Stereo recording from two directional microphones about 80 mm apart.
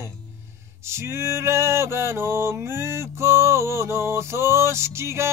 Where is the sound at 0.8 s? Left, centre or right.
Right.